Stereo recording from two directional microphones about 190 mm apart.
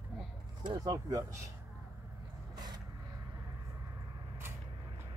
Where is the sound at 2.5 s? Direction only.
20° right (ahead or behind).